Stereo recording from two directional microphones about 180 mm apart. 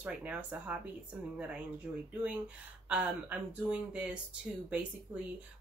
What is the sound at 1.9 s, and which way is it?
Speech, 10° right (ahead or behind).